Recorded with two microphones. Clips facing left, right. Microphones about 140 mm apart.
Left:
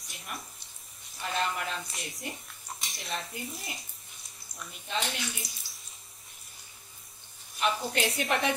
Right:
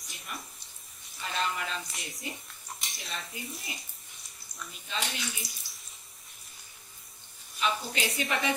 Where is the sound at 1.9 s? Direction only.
Centre (ahead or behind).